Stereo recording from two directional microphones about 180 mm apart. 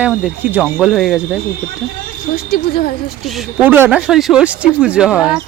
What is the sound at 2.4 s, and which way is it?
Speech, 60° left (ahead or behind).